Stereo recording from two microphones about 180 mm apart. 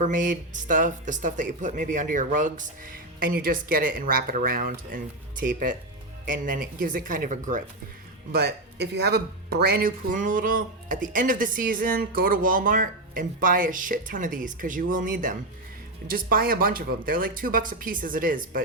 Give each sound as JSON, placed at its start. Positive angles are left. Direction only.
{"t": 0.0, "sound": "speech", "side_deg": -45}
{"t": 8.3, "sound": "speech", "side_deg": -65}